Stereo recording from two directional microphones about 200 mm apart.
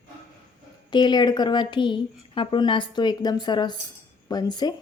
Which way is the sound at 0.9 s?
20° left (ahead or behind).